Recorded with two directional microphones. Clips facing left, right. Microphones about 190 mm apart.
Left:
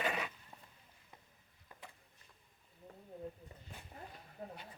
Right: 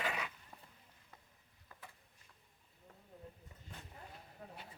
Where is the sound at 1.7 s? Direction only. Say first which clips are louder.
Left 2 dB; 15° left (ahead or behind).